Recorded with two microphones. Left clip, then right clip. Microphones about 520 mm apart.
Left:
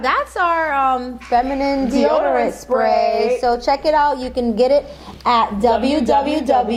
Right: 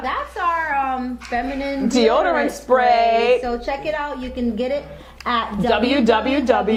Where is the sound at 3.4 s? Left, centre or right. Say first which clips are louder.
Left 7 dB; left.